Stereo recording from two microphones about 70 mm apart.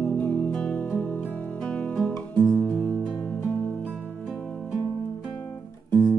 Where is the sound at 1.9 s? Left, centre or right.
Centre.